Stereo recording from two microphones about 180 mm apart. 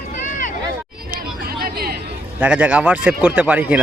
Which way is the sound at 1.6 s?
55° right (ahead or behind).